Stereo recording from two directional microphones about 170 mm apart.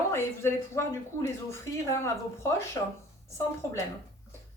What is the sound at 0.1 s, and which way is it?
Speech, 15° left (ahead or behind).